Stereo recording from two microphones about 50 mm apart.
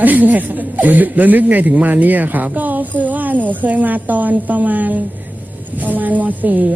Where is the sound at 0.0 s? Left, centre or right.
Right.